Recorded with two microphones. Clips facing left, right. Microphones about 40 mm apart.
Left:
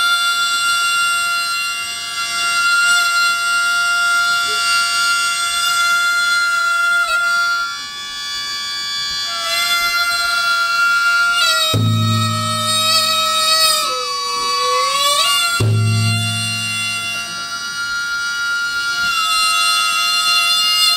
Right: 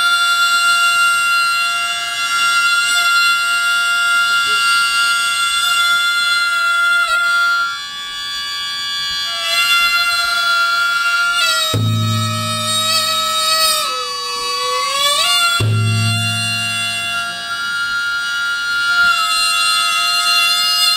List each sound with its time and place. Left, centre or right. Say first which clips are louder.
0.0 s music: right 2 dB; right
9.6 s wind instrument: right 3 dB; right
12.9 s music: left 1 dB; right
18.9 s music: right 7 dB; right